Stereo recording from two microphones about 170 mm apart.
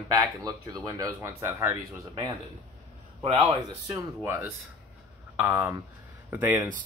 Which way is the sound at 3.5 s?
20° right (ahead or behind).